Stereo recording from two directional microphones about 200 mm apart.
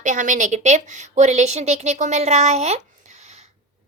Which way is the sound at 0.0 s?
40° right (ahead or behind).